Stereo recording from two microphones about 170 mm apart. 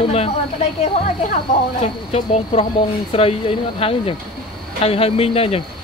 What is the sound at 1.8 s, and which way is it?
Speech, 35° left (ahead or behind).